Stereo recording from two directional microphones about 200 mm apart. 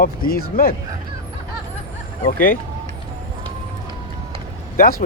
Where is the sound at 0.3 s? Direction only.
45° left (ahead or behind).